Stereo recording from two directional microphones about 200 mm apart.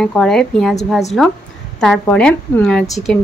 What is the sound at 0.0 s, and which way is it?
A woman's voice, 5° left (ahead or behind).